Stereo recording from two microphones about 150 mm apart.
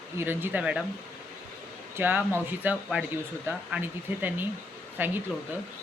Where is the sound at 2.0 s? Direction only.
15° right (ahead or behind).